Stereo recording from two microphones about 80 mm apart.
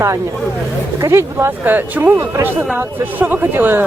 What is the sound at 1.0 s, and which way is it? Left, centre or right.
Speech, right.